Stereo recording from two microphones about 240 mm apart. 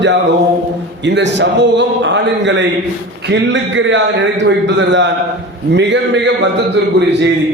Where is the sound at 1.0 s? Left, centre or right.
Right.